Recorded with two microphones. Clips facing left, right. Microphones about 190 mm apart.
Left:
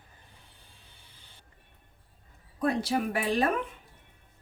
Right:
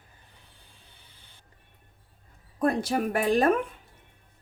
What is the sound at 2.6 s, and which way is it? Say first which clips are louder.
Speech: right 2 dB; 50° right (ahead or behind).